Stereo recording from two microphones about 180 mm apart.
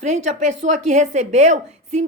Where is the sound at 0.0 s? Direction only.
40° right (ahead or behind).